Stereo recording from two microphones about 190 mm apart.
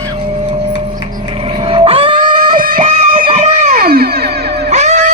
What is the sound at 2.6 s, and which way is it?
Music, 50° right (ahead or behind).